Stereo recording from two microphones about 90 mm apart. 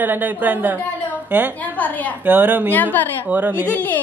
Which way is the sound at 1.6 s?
20° left (ahead or behind).